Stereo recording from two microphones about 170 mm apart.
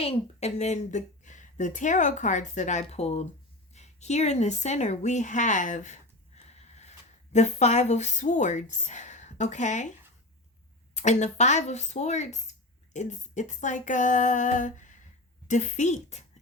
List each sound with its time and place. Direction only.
0.0 s a woman's voice: 35° left (ahead or behind)
10.9 s speech: 45° left (ahead or behind)